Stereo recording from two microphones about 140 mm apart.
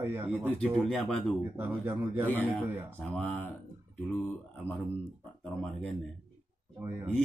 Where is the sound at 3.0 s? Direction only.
5° left (ahead or behind).